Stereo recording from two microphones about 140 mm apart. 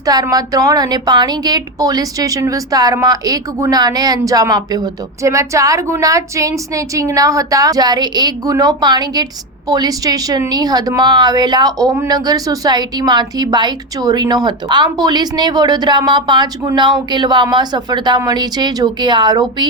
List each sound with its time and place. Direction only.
0.0 s a woman's voice: 25° right (ahead or behind)